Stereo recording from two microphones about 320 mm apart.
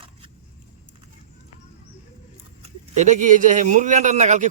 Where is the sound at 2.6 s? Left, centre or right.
Right.